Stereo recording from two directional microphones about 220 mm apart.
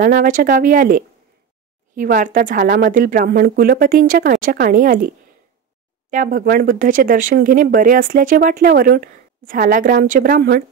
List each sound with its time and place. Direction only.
0.0 s a woman's voice: 40° right (ahead or behind)